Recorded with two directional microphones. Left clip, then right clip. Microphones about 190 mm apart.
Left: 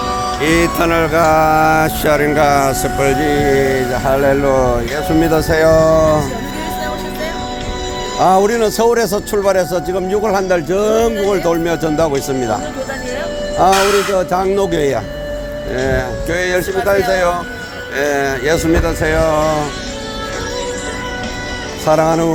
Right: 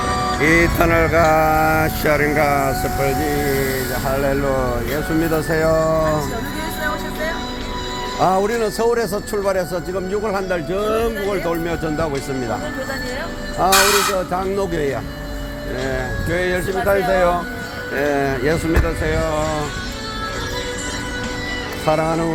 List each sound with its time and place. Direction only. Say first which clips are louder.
0.1 s music: left 1 dB; 20° left (ahead or behind); by 4.8 s 40° left (ahead or behind)
5.2 s speech: left 7 dB; 35° left (ahead or behind)
8.2 s speech: left 6 dB; 40° left (ahead or behind)
13.6 s speech: left 3 dB; 35° left (ahead or behind)
17.9 s speech: left 3 dB; 40° left (ahead or behind)
21.8 s speech: left 6 dB; 35° left (ahead or behind)